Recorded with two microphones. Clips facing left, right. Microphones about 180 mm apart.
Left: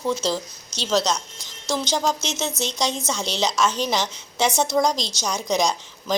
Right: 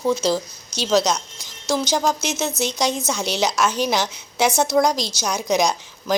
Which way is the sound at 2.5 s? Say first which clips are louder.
Right 3 dB; 10° right (ahead or behind).